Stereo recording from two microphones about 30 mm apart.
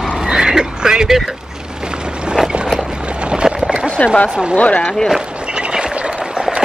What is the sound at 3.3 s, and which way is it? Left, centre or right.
Clip-clop, right.